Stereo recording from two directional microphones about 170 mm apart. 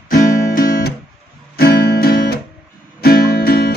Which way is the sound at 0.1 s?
55° left (ahead or behind).